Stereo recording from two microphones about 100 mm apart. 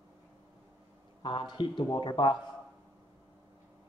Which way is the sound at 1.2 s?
50° left (ahead or behind).